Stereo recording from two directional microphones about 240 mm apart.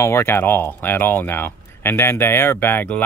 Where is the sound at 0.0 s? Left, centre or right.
Centre.